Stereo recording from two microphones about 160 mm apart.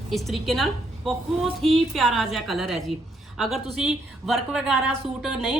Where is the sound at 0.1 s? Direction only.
Centre (ahead or behind).